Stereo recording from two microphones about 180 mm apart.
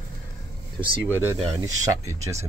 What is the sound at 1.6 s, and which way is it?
Speech, 20° right (ahead or behind).